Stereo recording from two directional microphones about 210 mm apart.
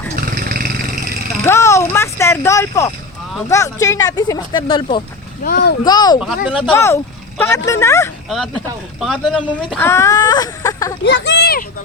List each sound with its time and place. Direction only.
0.2 s roaring cats: 40° right (ahead or behind)
1.5 s speech: 15° left (ahead or behind)
5.4 s a child's voice: 50° left (ahead or behind)
5.8 s speech: 20° left (ahead or behind)
6.1 s speech: 5° right (ahead or behind)
6.7 s speech: 15° left (ahead or behind)
8.3 s speech: centre (ahead or behind); by 10.9 s 15° left (ahead or behind)
11.0 s speech: 55° left (ahead or behind)